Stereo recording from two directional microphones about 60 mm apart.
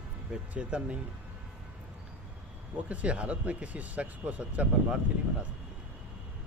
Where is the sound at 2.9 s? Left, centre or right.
Right.